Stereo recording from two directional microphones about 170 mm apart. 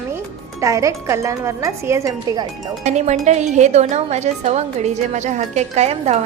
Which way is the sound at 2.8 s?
45° right (ahead or behind).